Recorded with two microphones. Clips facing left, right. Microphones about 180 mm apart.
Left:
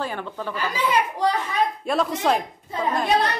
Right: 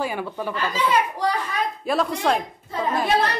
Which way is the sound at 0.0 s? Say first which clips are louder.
Right 2 dB; 10° right (ahead or behind).